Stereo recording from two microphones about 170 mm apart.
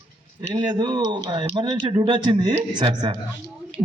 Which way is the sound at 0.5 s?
25° right (ahead or behind).